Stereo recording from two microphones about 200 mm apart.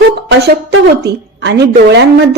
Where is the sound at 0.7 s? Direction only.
55° right (ahead or behind).